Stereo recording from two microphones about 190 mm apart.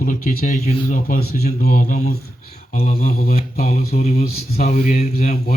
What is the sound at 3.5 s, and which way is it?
Speech, 35° left (ahead or behind).